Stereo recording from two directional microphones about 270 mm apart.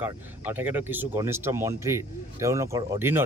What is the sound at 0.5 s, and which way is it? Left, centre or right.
Speech, centre.